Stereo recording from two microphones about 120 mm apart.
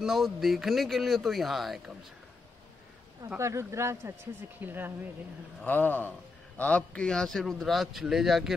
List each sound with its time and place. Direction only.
0.0 s a man's voice: centre (ahead or behind)
3.3 s speech: 25° right (ahead or behind)
5.7 s a man's voice: 15° left (ahead or behind); by 8.5 s centre (ahead or behind)